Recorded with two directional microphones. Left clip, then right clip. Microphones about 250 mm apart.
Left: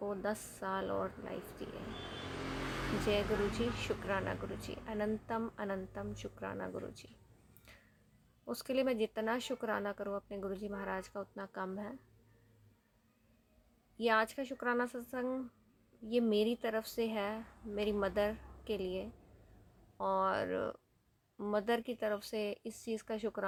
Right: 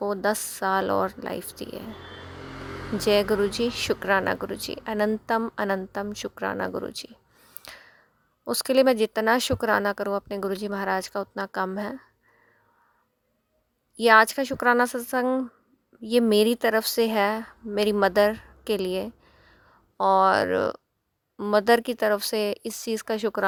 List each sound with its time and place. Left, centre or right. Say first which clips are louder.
0.0 s speech: right 13 dB; right
3.1 s speech: right 14 dB; right
7.6 s finger snapping: right 17 dB; right
8.4 s speech: right 15 dB; right
13.9 s speech: right 15 dB; right